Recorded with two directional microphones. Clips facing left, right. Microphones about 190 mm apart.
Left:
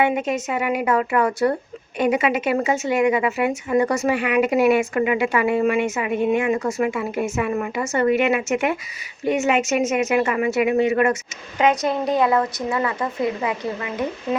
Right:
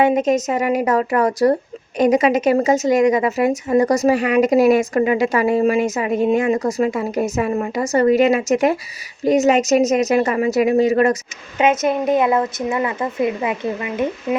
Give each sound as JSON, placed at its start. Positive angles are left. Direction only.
{"t": 0.0, "sound": "a woman's voice", "side_deg": -40}
{"t": 11.5, "sound": "a woman's voice", "side_deg": -20}